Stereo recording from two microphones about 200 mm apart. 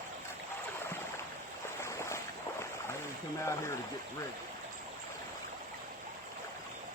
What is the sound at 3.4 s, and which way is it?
Speech, 15° left (ahead or behind).